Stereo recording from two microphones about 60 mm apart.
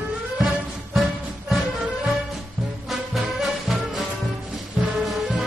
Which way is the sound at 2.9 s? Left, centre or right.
Centre.